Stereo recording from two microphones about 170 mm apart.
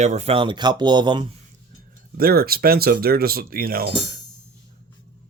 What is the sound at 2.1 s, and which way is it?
Speech, 60° right (ahead or behind).